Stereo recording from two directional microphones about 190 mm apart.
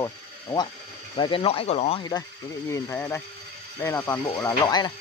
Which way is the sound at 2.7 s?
15° left (ahead or behind).